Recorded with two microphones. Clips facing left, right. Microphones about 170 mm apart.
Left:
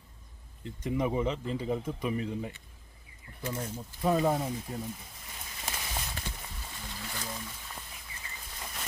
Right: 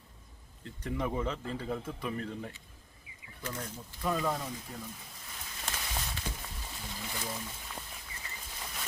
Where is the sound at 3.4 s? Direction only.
25° left (ahead or behind).